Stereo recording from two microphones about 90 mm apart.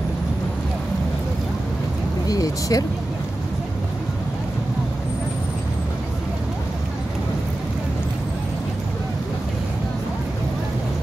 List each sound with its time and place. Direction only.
2.2 s speech: 40° left (ahead or behind)